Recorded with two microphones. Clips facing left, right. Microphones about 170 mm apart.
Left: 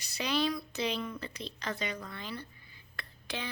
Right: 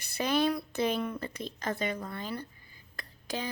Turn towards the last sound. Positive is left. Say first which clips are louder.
# right 4 dB
turn(degrees=-40)  # may be behind; listen again after turning